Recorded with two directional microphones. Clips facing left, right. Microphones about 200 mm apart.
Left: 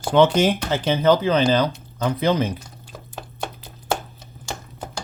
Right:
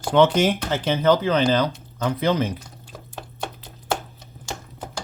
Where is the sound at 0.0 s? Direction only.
5° left (ahead or behind).